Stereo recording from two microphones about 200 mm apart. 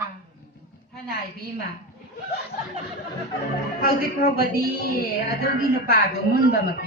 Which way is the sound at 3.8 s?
45° left (ahead or behind).